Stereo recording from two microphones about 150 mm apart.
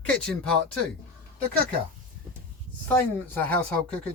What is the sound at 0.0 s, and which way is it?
Speech, 5° left (ahead or behind).